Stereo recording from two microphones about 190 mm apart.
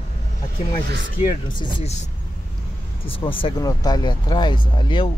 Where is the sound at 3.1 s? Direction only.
30° left (ahead or behind).